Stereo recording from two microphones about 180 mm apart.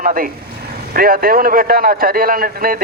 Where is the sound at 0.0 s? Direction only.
50° right (ahead or behind).